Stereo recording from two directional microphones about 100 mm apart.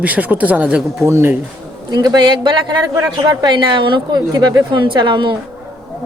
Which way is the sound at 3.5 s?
55° right (ahead or behind).